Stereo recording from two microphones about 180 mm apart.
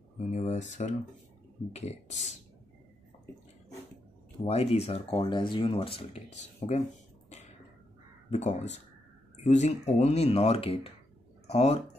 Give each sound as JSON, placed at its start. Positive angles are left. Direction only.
{"t": 0.2, "sound": "speech", "side_deg": 40}
{"t": 4.5, "sound": "speech", "side_deg": 35}
{"t": 8.3, "sound": "speech", "side_deg": 40}